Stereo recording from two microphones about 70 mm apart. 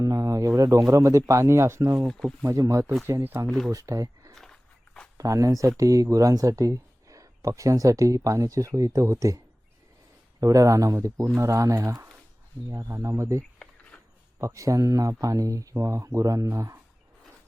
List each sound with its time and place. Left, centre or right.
0.0 s speech: right
2.0 s speech: centre
2.6 s speech: right
3.4 s speech: centre
3.7 s speech: right
10.4 s speech: right
13.9 s a sound: centre
14.3 s speech: right